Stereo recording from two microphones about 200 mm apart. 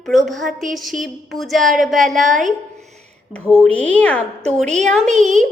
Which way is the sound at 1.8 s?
Centre (ahead or behind).